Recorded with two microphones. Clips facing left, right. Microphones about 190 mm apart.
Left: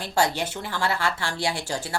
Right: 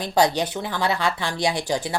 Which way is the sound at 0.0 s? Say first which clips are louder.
Right 4 dB; 15° right (ahead or behind).